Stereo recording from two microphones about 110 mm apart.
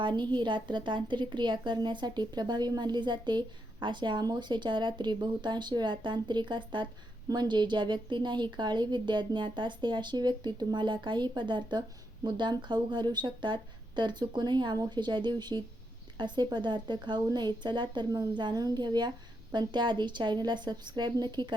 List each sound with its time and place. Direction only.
0.0 s a woman's voice: 45° right (ahead or behind)